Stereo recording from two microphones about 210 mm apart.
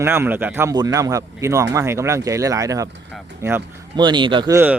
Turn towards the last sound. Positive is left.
turn(degrees=-20)  # may be behind; listen again after turning